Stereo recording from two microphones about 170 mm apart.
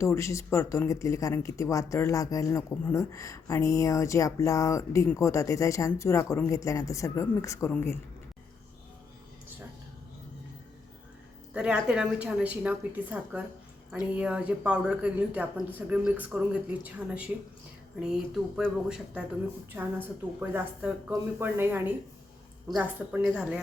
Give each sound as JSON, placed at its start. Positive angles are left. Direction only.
{"t": 0.0, "sound": "speech", "side_deg": 15}
{"t": 11.5, "sound": "speech", "side_deg": -5}